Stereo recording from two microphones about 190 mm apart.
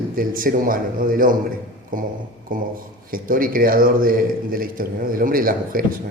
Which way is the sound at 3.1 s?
50° right (ahead or behind).